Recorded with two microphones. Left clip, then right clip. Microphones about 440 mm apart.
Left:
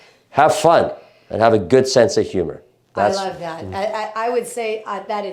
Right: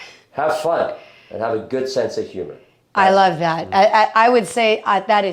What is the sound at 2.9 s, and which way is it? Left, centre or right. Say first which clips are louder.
A woman's voice: right 6 dB; right.